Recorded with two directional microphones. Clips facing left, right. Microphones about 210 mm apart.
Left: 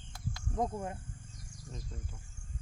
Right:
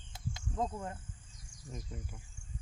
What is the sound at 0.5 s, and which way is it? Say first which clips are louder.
Speech: left 3 dB; 15° left (ahead or behind).